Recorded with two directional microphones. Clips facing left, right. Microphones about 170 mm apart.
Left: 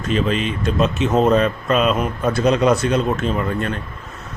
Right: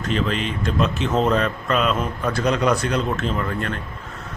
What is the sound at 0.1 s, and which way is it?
Speech, 20° left (ahead or behind).